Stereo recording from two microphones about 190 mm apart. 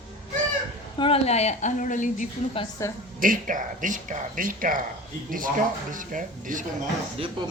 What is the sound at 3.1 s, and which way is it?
Speech, 45° right (ahead or behind).